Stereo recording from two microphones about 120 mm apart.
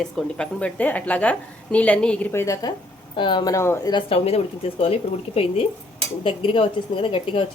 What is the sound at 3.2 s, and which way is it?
Speech, 40° left (ahead or behind).